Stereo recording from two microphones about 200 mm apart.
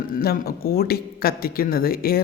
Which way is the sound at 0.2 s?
50° left (ahead or behind).